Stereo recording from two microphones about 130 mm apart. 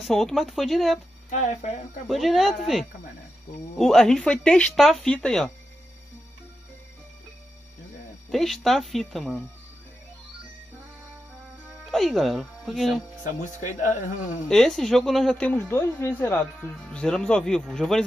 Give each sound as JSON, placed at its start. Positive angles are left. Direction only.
{"t": 0.0, "sound": "speech", "side_deg": 0}
{"t": 1.3, "sound": "speech", "side_deg": 65}
{"t": 2.0, "sound": "speech", "side_deg": 0}
{"t": 8.3, "sound": "speech", "side_deg": 0}
{"t": 11.7, "sound": "speech", "side_deg": 0}
{"t": 13.2, "sound": "speech", "side_deg": 70}
{"t": 14.5, "sound": "speech", "side_deg": 5}